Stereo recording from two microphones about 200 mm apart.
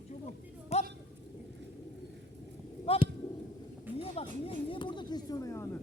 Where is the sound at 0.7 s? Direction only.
35° left (ahead or behind).